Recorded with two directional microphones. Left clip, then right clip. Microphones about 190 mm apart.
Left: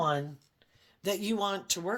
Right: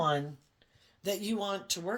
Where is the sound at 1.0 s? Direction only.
40° left (ahead or behind).